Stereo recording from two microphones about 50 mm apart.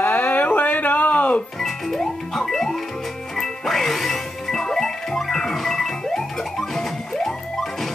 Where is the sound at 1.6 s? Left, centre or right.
Centre.